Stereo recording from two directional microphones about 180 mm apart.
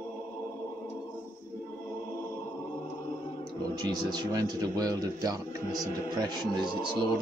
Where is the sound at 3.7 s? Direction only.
20° right (ahead or behind).